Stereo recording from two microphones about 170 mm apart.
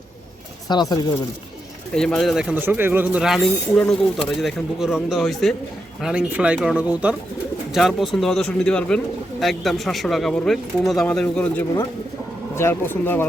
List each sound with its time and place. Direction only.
0.7 s speech: 25° left (ahead or behind)
2.0 s speech: 5° left (ahead or behind)